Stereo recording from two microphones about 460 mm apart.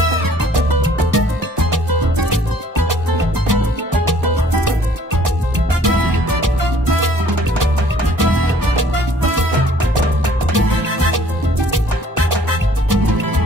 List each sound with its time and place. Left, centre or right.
0.2 s music: right
5.8 s music: right
8.2 s music: right
10.5 s music: right
12.4 s music: right